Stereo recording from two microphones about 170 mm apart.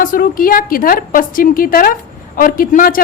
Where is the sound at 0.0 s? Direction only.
55° left (ahead or behind).